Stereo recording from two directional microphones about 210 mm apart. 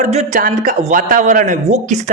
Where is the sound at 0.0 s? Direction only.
35° right (ahead or behind).